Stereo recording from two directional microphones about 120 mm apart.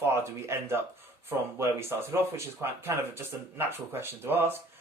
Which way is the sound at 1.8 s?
20° right (ahead or behind).